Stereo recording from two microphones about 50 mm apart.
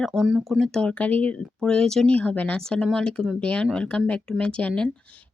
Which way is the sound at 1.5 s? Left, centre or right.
Centre.